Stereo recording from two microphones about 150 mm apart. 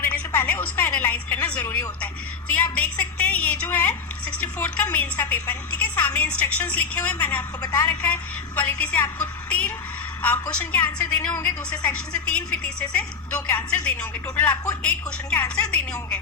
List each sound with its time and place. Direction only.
0.1 s music: 15° left (ahead or behind)
2.7 s a woman's voice: 10° left (ahead or behind)
7.6 s a woman's voice: 25° left (ahead or behind)
7.9 s a woman's voice: 10° left (ahead or behind)
14.5 s a woman's voice: 25° left (ahead or behind)
14.8 s a woman's voice: 10° left (ahead or behind)